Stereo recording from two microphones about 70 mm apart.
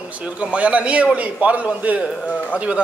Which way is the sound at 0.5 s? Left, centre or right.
Centre.